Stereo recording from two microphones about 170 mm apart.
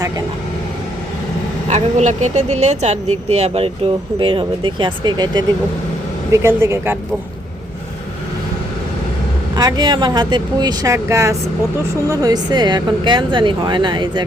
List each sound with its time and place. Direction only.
1.7 s speech: 45° right (ahead or behind); by 7.0 s 15° right (ahead or behind)
9.6 s speech: 25° right (ahead or behind)